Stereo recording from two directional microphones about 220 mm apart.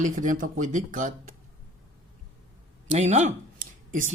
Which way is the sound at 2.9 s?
30° right (ahead or behind).